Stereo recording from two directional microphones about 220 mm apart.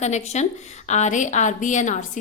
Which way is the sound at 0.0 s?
30° left (ahead or behind).